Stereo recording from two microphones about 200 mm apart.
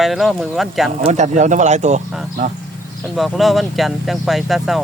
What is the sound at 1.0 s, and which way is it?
Speech, 35° right (ahead or behind).